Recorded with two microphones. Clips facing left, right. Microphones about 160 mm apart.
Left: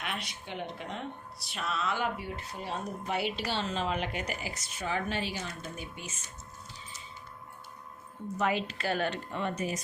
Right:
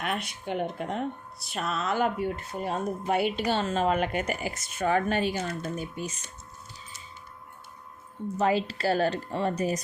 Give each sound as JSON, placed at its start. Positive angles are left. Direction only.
{"t": 0.0, "sound": "speech", "side_deg": -50}
{"t": 8.4, "sound": "speech", "side_deg": -35}